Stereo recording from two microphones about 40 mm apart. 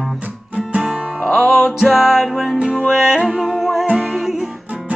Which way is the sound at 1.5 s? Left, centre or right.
Centre.